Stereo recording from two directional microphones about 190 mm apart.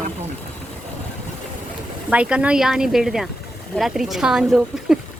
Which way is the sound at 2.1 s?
5° right (ahead or behind).